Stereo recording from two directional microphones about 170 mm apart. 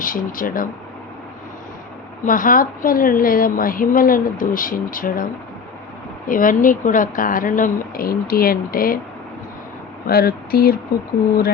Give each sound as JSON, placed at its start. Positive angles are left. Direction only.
{"t": 0.0, "sound": "a woman's voice", "side_deg": 55}
{"t": 2.2, "sound": "a woman's voice", "side_deg": 50}
{"t": 10.1, "sound": "a woman's voice", "side_deg": 60}